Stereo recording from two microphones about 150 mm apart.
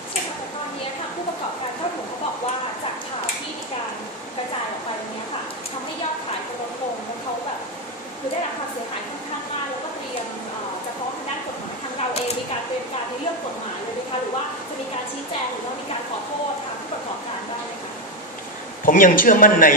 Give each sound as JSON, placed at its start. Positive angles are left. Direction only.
{"t": 18.9, "sound": "speech", "side_deg": 65}